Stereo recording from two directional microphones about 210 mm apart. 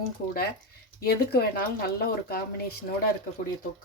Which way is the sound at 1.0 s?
45° left (ahead or behind).